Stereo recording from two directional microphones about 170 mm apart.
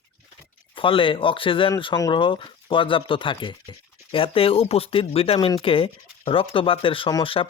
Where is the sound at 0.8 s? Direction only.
30° left (ahead or behind).